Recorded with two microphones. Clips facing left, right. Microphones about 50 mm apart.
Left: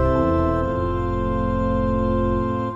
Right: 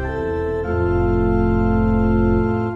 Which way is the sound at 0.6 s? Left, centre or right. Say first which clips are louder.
Right 4 dB; right.